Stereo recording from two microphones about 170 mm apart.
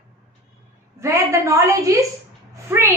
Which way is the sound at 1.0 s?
15° right (ahead or behind).